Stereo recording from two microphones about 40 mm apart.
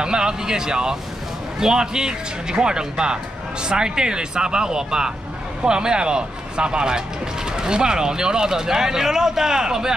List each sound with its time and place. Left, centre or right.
0.0 s speech: centre